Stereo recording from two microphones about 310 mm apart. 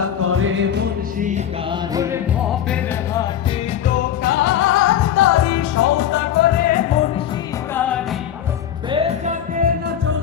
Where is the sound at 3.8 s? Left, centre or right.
Left.